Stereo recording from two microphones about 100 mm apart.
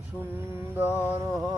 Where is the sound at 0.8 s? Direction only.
20° right (ahead or behind).